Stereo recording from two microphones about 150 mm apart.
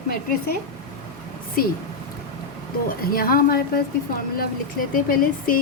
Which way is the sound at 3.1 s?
75° left (ahead or behind).